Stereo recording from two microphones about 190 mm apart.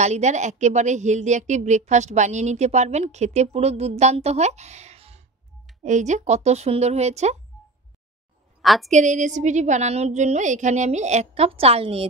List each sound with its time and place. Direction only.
0.0 s a woman's voice: 35° right (ahead or behind)
8.6 s a woman's voice: centre (ahead or behind)
8.9 s a woman's voice: 40° right (ahead or behind)